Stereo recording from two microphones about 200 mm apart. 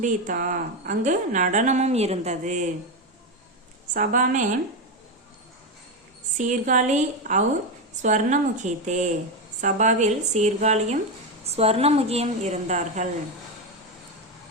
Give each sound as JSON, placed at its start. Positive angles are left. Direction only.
{"t": 0.0, "sound": "a woman's voice", "side_deg": -40}
{"t": 3.9, "sound": "a woman's voice", "side_deg": -40}
{"t": 6.3, "sound": "a woman's voice", "side_deg": -40}